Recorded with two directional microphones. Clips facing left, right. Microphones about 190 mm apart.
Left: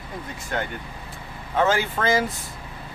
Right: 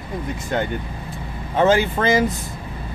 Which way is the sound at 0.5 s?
20° right (ahead or behind).